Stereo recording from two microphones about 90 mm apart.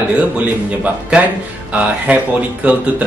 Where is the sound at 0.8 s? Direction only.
15° right (ahead or behind).